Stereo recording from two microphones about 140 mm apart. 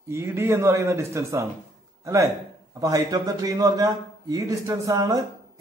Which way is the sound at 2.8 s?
25° right (ahead or behind).